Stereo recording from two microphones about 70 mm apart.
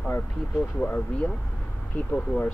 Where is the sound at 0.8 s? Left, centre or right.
Left.